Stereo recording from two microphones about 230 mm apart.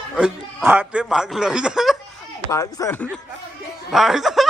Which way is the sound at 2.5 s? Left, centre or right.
Centre.